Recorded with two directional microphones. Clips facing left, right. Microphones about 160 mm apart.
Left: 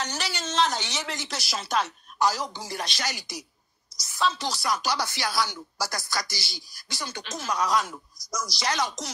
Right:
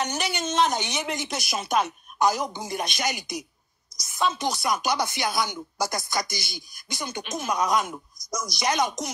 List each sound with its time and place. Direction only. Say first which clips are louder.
0.0 s speech: right 4 dB; 20° right (ahead or behind)